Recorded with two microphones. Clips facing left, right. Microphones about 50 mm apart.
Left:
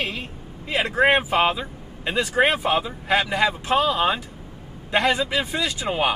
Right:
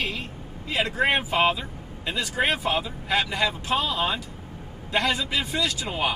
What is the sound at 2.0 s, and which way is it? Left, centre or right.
Speech, left.